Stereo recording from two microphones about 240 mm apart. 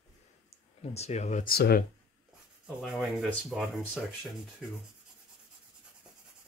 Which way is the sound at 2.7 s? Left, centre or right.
Centre.